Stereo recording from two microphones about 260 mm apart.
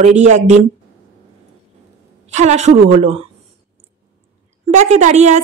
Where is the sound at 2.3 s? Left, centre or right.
Right.